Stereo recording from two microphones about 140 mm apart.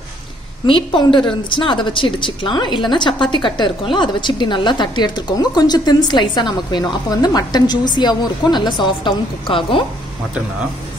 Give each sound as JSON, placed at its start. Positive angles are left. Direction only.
{"t": 0.7, "sound": "a woman's voice", "side_deg": 35}